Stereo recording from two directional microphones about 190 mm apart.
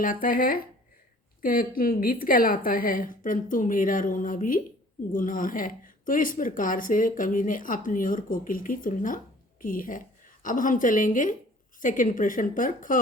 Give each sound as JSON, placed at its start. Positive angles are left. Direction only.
{"t": 0.0, "sound": "speech", "side_deg": 45}